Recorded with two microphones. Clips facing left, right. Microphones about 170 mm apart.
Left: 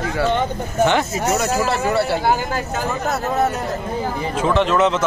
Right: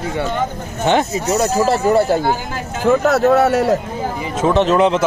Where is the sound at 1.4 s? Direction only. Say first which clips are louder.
Right 4 dB; 35° right (ahead or behind).